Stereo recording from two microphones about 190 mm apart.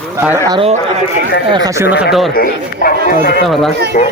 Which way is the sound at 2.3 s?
50° left (ahead or behind).